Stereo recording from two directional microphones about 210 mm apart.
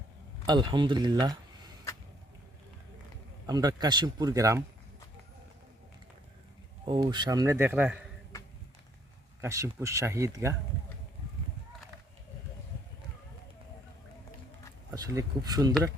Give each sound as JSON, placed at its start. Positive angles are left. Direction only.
{"t": 0.4, "sound": "speech", "side_deg": -20}
{"t": 3.4, "sound": "speech", "side_deg": -20}
{"t": 6.8, "sound": "a man's voice", "side_deg": -20}
{"t": 9.4, "sound": "a man's voice", "side_deg": -15}
{"t": 14.8, "sound": "a man's voice", "side_deg": -15}